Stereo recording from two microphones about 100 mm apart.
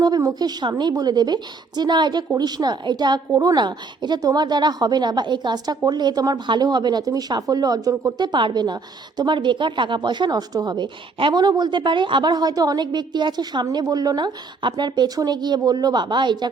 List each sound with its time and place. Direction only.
0.0 s a woman's voice: 40° right (ahead or behind)